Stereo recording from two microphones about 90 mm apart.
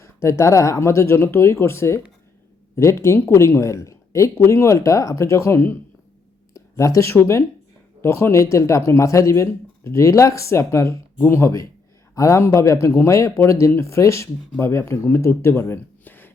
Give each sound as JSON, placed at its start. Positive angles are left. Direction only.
{"t": 0.0, "sound": "speech", "side_deg": 35}